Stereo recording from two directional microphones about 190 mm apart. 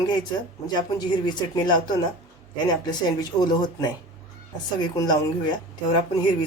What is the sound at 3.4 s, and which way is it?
Speech, 20° left (ahead or behind).